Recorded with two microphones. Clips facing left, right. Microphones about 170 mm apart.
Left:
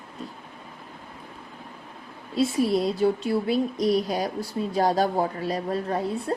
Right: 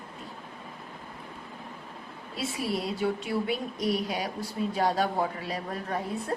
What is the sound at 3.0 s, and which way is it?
A woman's voice, 35° left (ahead or behind).